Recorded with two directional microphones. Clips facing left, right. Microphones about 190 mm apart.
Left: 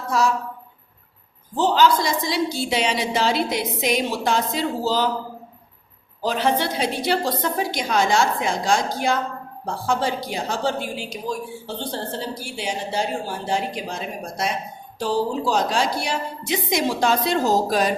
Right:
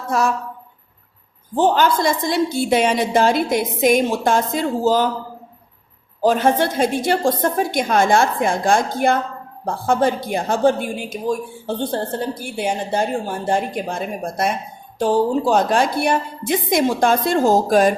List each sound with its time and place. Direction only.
0.1 s a woman's voice: 55° right (ahead or behind)
1.5 s a woman's voice: 55° right (ahead or behind)
6.2 s a woman's voice: 50° right (ahead or behind)